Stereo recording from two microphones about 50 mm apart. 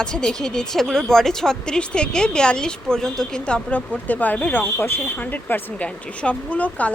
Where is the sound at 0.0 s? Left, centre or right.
Centre; by 5.7 s left.